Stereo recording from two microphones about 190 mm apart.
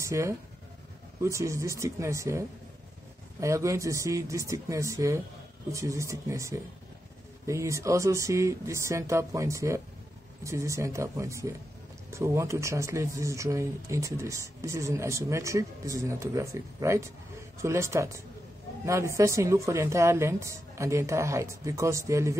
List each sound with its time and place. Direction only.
0.0 s speech: 15° right (ahead or behind)